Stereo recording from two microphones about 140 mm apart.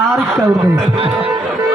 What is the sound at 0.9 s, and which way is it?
Speech, 40° right (ahead or behind).